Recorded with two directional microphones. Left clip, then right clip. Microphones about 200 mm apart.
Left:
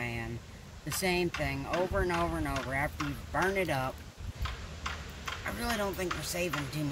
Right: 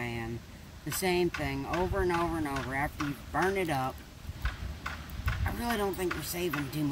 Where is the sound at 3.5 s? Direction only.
Centre (ahead or behind).